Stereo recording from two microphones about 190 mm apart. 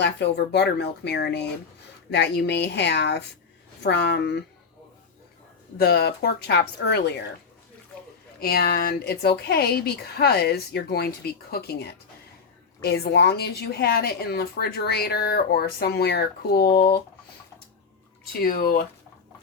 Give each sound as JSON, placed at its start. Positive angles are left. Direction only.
{"t": 0.0, "sound": "a woman's voice", "side_deg": 60}
{"t": 5.8, "sound": "a woman's voice", "side_deg": 55}
{"t": 8.4, "sound": "a woman's voice", "side_deg": 55}
{"t": 18.3, "sound": "speech", "side_deg": 50}